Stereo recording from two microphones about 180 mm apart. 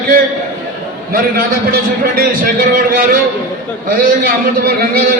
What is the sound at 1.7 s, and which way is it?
A man's voice, 50° right (ahead or behind).